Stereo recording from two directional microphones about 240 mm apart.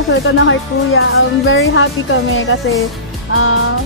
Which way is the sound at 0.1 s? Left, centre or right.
Left.